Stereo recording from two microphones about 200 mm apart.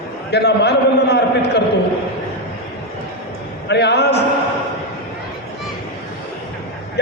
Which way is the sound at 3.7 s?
55° left (ahead or behind).